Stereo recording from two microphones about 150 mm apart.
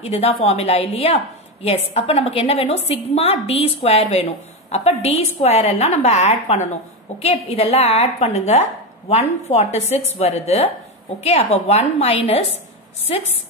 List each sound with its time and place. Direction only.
0.0 s a woman's voice: 40° left (ahead or behind)